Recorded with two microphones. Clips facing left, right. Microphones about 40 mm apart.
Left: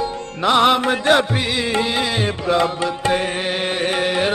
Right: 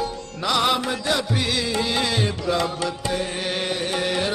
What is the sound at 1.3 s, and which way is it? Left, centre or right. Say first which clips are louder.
Music: left 3 dB; left.